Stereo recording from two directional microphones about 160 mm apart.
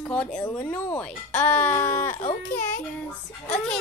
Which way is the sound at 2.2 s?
55° left (ahead or behind).